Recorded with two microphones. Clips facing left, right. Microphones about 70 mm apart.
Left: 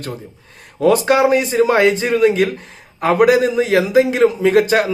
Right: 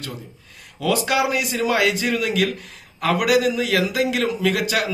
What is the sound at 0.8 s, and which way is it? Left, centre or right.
A man's voice, left.